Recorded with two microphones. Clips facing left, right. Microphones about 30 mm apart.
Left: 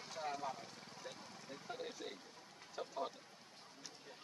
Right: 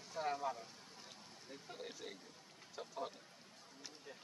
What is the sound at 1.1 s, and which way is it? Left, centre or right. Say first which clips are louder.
Vehicle: left 3 dB; centre.